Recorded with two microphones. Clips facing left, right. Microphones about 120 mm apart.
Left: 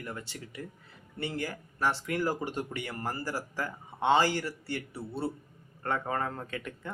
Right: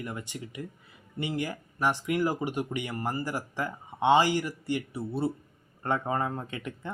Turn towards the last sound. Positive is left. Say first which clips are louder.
# right 1 dB
turn(degrees=-20)  # may be behind; listen again after turning